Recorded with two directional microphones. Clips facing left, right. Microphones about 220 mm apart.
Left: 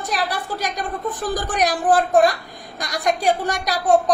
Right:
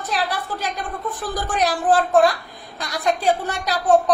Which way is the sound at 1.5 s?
15° left (ahead or behind).